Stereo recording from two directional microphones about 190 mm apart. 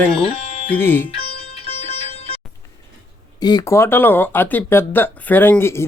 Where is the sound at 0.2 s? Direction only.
30° left (ahead or behind).